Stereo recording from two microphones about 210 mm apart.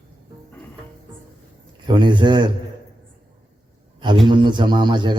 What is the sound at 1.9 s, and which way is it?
Speech, 20° right (ahead or behind).